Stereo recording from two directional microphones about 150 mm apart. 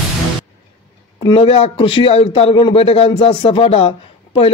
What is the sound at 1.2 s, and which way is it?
A man's voice, 40° left (ahead or behind).